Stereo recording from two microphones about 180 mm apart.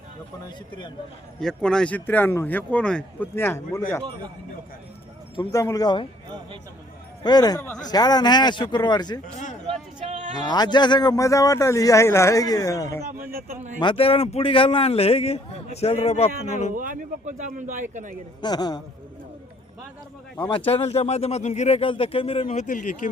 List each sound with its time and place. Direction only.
1.4 s speech: 5° left (ahead or behind)
5.4 s speech: 20° left (ahead or behind)
7.2 s speech: 20° left (ahead or behind)
9.2 s a man's voice: 45° left (ahead or behind)
10.4 s speech: 25° left (ahead or behind)
13.3 s speech: 55° right (ahead or behind)
13.7 s a man's voice: 30° left (ahead or behind)
16.7 s speech: 50° right (ahead or behind)
18.4 s speech: 20° left (ahead or behind)
20.7 s a man's voice: 35° left (ahead or behind)